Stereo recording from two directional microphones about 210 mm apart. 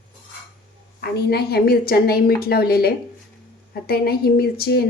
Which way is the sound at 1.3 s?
50° left (ahead or behind).